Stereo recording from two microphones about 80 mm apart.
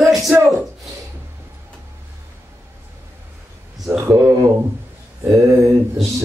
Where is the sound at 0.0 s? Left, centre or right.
Centre.